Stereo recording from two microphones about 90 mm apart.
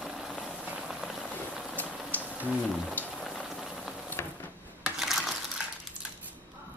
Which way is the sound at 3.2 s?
Centre (ahead or behind).